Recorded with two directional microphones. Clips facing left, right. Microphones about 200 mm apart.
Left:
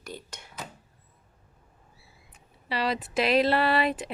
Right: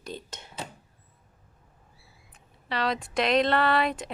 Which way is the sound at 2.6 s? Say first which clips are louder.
Even; 5° left (ahead or behind).